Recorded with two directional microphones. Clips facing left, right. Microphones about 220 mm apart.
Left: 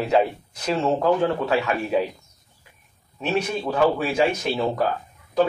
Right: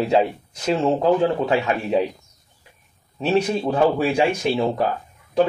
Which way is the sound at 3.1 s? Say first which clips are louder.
Right 5 dB; 35° right (ahead or behind).